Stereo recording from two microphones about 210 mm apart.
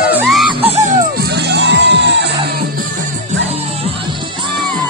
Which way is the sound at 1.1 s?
50° right (ahead or behind).